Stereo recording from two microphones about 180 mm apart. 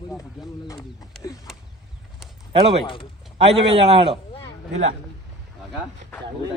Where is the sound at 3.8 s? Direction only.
30° right (ahead or behind).